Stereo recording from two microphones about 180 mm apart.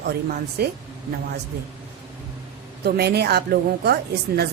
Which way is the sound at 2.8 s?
65° right (ahead or behind).